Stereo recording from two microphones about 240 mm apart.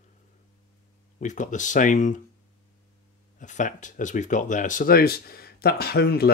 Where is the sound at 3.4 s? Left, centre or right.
Left.